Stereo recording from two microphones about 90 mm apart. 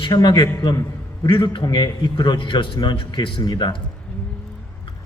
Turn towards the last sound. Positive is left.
turn(degrees=55)  # may be behind; listen again after turning